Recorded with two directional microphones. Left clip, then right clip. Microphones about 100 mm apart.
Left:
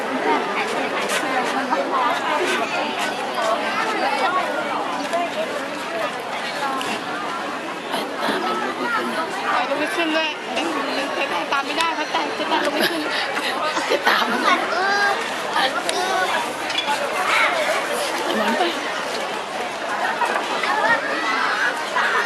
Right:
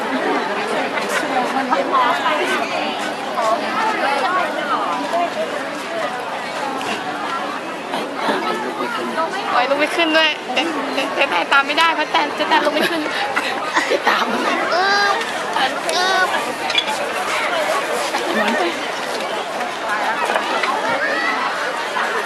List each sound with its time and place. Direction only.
10.0 s speech: 20° right (ahead or behind)
14.0 s speech: centre (ahead or behind)
14.7 s a sound: 20° right (ahead or behind)